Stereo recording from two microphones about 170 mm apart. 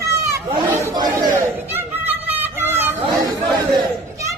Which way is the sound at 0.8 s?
20° right (ahead or behind).